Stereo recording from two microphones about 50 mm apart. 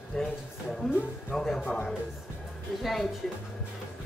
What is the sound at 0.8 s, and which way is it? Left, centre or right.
Speech, centre.